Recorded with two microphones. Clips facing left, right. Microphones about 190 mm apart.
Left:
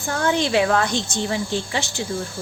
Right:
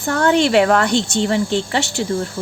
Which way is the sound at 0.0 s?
65° right (ahead or behind).